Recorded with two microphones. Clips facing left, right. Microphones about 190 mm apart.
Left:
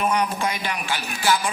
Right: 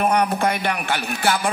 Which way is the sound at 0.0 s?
60° right (ahead or behind).